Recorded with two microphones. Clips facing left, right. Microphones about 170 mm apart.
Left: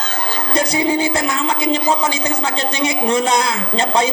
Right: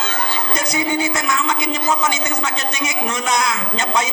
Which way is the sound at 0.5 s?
30° left (ahead or behind).